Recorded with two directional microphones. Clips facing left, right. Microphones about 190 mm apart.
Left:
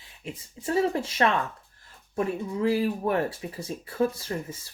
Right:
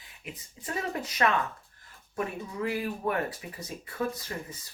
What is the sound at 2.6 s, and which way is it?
Speech, 30° left (ahead or behind).